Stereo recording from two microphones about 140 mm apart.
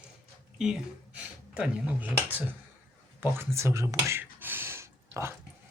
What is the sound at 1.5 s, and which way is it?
Speech, 10° right (ahead or behind).